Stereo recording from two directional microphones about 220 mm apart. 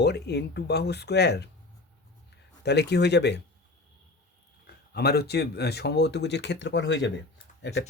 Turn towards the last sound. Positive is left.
turn(degrees=50)  # may be behind; listen again after turning